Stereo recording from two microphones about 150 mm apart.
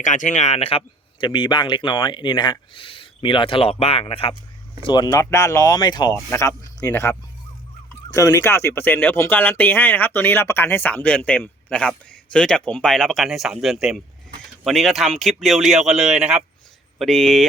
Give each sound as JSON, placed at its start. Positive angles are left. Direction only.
{"t": 0.0, "sound": "speech", "side_deg": 55}
{"t": 1.2, "sound": "speech", "side_deg": 35}